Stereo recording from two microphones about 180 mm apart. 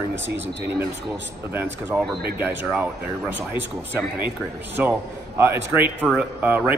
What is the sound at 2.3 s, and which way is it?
Speech, 10° right (ahead or behind).